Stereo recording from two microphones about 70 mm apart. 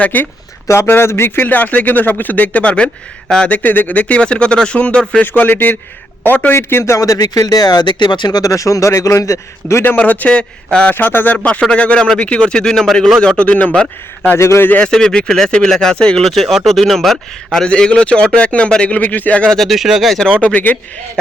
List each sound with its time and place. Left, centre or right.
0.0 s speech: left
0.7 s speech: left
1.5 s speech: left
5.3 s speech: left
7.0 s speech: left
9.8 s speech: left
10.9 s speech: left
11.7 s speech: centre
14.3 s speech: left
14.7 s speech: centre
19.5 s speech: centre
20.4 s speech: left